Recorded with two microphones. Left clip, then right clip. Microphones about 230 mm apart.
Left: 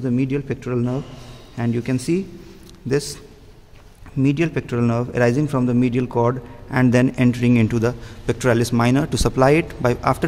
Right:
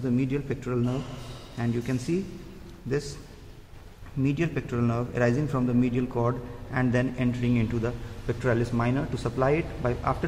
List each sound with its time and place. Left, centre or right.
0.0 s a man's voice: left
4.2 s a man's voice: left